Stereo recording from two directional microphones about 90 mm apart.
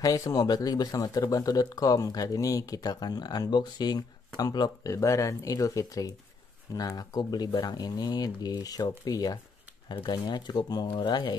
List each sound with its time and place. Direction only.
0.0 s speech: 40° left (ahead or behind)